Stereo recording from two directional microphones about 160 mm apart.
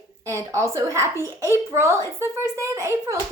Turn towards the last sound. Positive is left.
turn(degrees=-20)  # may be behind; listen again after turning